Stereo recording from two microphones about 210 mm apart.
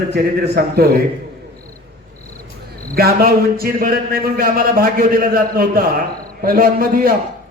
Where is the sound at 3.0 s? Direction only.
45° right (ahead or behind).